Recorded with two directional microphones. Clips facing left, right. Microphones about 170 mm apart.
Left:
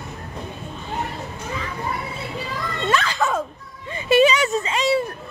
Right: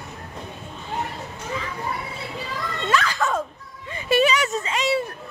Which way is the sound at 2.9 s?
25° left (ahead or behind).